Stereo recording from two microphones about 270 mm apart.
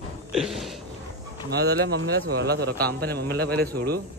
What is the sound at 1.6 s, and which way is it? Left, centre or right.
A man's voice, right.